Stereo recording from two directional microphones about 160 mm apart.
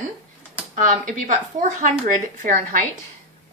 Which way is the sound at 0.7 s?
55° right (ahead or behind).